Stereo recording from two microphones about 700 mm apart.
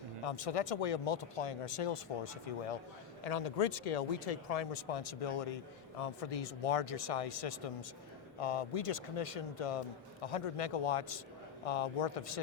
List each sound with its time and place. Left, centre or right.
0.3 s speech: left
3.2 s speech: left